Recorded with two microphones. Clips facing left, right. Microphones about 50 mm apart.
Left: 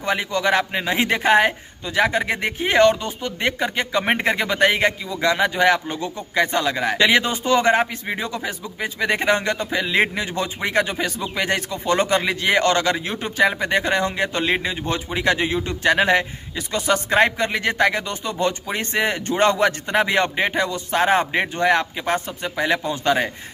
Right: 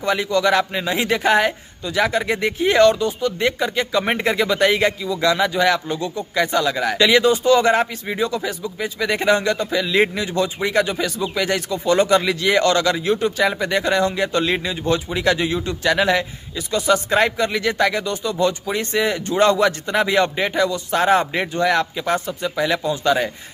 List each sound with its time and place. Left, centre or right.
0.0 s speech: left